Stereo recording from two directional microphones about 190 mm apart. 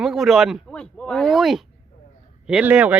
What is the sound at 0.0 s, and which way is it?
Speech, centre (ahead or behind).